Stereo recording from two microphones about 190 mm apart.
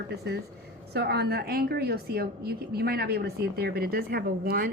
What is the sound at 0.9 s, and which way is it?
A woman's voice, 60° right (ahead or behind).